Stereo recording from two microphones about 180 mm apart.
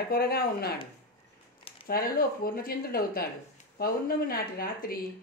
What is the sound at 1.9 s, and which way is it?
A woman's voice, 55° left (ahead or behind).